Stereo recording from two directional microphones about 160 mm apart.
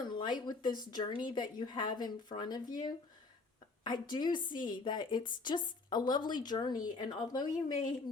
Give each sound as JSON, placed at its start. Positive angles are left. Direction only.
{"t": 0.1, "sound": "a woman's voice", "side_deg": 30}